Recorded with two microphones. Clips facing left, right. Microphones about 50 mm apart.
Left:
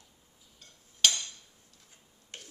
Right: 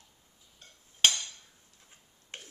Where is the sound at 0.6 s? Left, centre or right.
Right.